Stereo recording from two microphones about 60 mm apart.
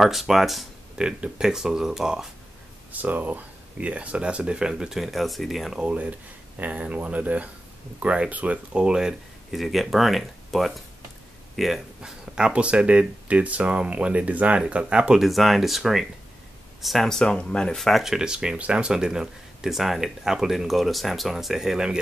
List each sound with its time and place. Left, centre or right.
0.0 s speech: centre
0.9 s speech: centre
2.9 s speech: right; by 5.8 s centre
5.8 s speech: right
8.7 s speech: centre
12.0 s speech: centre
15.1 s speech: centre
17.7 s speech: centre
18.1 s speech: centre